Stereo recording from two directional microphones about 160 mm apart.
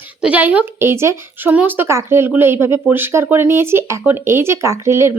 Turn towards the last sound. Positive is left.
turn(degrees=-15)  # may be behind; listen again after turning